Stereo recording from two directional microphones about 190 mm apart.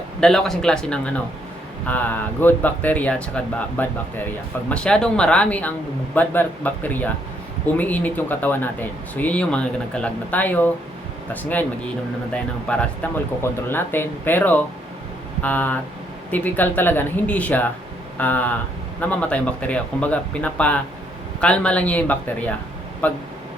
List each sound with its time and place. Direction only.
0.2 s speech: 5° left (ahead or behind)
12.3 s speech: 5° left (ahead or behind)